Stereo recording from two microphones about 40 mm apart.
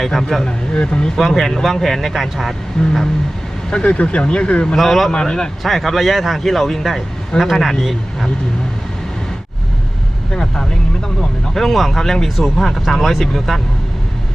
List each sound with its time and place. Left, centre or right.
0.0 s speech: centre
0.4 s speech: left
1.2 s speech: centre
3.7 s speech: left
4.6 s speech: centre
5.1 s speech: centre
5.6 s speech: centre
10.3 s speech: centre
11.2 s speech: centre